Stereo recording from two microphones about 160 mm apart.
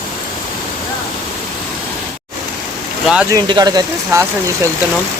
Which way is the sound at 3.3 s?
25° right (ahead or behind).